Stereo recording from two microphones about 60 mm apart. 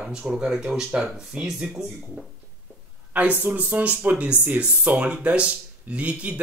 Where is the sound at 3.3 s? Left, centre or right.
Right.